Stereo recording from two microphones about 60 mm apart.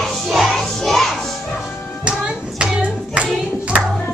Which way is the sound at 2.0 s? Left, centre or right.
Centre.